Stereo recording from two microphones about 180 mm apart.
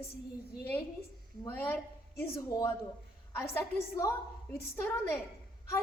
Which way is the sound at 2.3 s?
20° left (ahead or behind).